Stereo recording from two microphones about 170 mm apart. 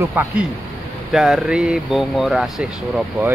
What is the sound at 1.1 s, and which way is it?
Speech, 5° right (ahead or behind).